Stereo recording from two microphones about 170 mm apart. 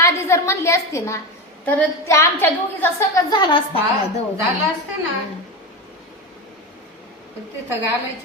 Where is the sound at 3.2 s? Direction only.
25° left (ahead or behind).